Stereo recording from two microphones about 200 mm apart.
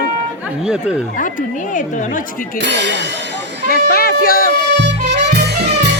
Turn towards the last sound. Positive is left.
turn(degrees=-55)  # may be behind; listen again after turning